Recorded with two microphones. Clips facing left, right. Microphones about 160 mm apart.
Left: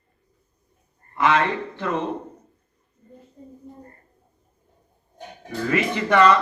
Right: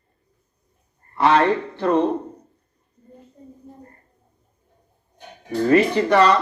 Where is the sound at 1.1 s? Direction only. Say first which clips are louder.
Right 4 dB; 35° right (ahead or behind).